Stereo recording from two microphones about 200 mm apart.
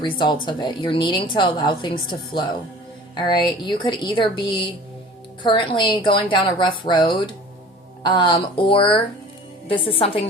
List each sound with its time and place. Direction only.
0.0 s a woman's voice: 20° left (ahead or behind)